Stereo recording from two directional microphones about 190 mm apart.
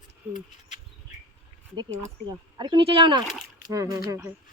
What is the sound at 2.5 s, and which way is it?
Speech, 25° right (ahead or behind).